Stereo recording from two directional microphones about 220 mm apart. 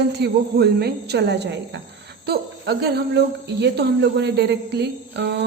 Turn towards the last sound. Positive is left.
turn(degrees=-50)  # may be behind; listen again after turning